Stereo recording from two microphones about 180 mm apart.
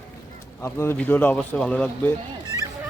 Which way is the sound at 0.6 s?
10° left (ahead or behind).